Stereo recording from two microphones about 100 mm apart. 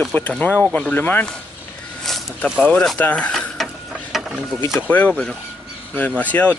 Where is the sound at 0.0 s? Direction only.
10° left (ahead or behind).